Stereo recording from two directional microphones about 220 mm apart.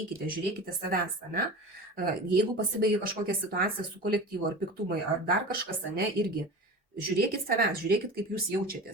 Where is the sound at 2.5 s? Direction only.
40° right (ahead or behind).